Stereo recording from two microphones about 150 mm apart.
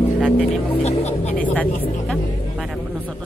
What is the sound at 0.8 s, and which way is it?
Music, 45° left (ahead or behind).